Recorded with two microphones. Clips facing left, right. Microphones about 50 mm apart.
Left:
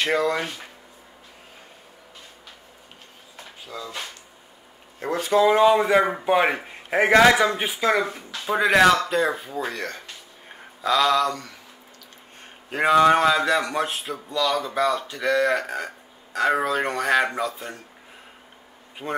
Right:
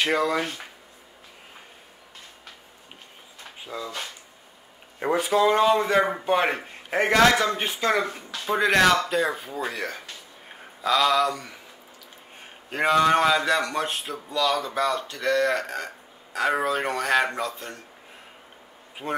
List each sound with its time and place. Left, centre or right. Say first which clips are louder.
0.0 s a man's voice: left 1 dB; centre
3.6 s speech: right 2 dB; centre
5.0 s speech: right 3 dB; centre
5.3 s a man's voice: left 4 dB; centre
12.6 s a man's voice: left 3 dB; centre
19.0 s a man's voice: even; centre